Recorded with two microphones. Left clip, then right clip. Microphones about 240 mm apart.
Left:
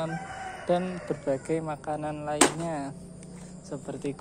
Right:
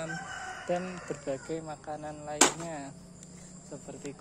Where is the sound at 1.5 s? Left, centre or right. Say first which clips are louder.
Left 7 dB; centre.